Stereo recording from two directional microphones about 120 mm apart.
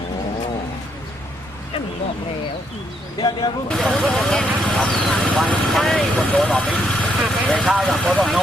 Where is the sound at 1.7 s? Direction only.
50° left (ahead or behind).